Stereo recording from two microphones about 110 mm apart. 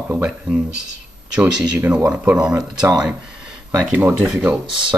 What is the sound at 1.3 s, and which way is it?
Speech, 15° right (ahead or behind).